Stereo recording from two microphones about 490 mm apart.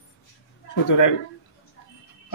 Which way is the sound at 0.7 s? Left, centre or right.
Left.